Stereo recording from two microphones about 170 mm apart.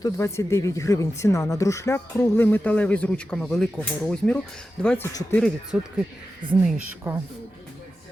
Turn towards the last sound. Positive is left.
turn(degrees=-15)  # may be behind; listen again after turning